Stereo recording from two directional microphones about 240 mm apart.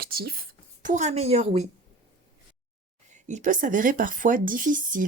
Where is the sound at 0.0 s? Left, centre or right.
Right.